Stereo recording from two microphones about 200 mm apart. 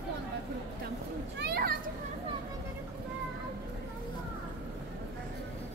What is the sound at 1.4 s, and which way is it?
Children playing, 50° right (ahead or behind).